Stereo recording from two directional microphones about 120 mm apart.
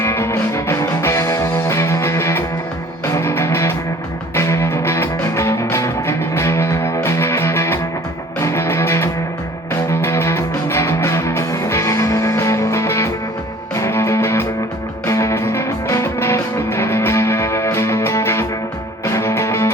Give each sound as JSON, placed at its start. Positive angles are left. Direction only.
{"t": 0.0, "sound": "music", "side_deg": 20}